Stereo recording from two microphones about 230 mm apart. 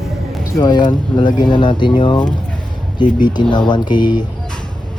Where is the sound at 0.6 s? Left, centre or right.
Centre.